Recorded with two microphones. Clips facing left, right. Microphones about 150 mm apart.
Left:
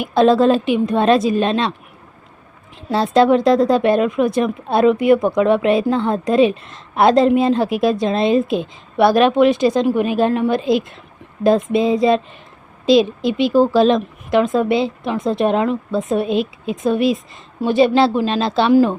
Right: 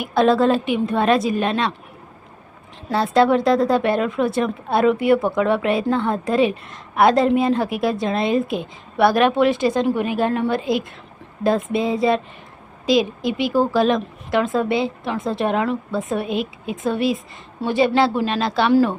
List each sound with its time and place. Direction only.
0.0 s a woman's voice: 20° left (ahead or behind)
2.9 s a woman's voice: 20° left (ahead or behind)